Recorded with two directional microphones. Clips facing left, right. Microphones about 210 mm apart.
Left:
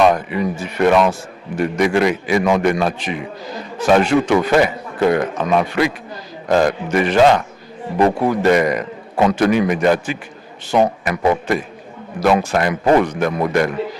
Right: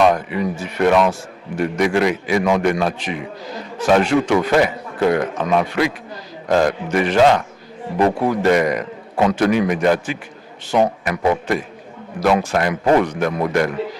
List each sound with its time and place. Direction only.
0.0 s a man's voice: 15° left (ahead or behind)